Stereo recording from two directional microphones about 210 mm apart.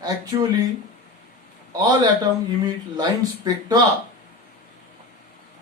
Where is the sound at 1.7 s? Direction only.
20° right (ahead or behind).